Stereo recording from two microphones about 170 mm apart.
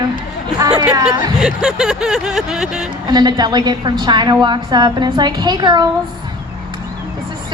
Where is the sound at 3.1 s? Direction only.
25° right (ahead or behind).